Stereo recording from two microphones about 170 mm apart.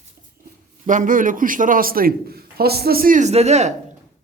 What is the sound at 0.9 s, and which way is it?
A man's voice, 50° right (ahead or behind).